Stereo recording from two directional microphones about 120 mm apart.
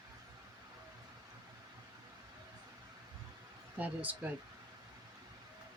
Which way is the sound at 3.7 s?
15° right (ahead or behind).